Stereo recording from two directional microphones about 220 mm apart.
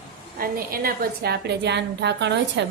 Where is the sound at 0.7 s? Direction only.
40° right (ahead or behind).